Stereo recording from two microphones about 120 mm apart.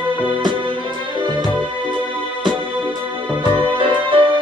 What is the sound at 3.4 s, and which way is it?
Music, 45° right (ahead or behind).